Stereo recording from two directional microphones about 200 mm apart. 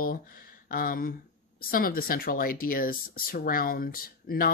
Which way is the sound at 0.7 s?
45° left (ahead or behind).